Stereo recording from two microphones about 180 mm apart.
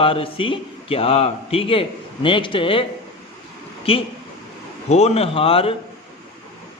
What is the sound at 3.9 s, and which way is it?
A man's voice, 30° left (ahead or behind).